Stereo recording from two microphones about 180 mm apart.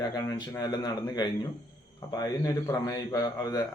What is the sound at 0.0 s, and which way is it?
A man's voice, 20° left (ahead or behind).